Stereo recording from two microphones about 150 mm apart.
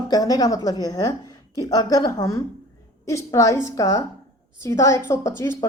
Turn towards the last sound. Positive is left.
turn(degrees=20)  # may be behind; listen again after turning